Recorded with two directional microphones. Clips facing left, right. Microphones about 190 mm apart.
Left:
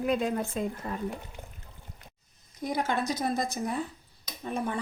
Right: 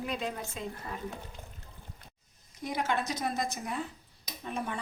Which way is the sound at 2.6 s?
40° left (ahead or behind).